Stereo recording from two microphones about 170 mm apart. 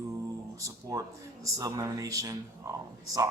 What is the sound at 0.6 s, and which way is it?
Speech, 20° right (ahead or behind).